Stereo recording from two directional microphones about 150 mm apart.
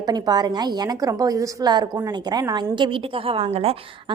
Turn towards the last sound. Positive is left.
turn(degrees=-40)  # may be behind; listen again after turning